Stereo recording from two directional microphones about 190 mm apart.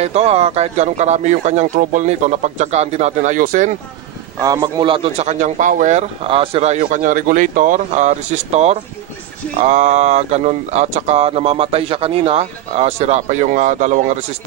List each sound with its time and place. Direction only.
0.0 s speech: 35° right (ahead or behind)
4.4 s speech: 15° right (ahead or behind); by 6.8 s 35° right (ahead or behind)
6.8 s speech: 45° right (ahead or behind)